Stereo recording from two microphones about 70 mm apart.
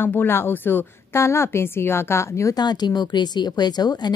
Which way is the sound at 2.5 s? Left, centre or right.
Left.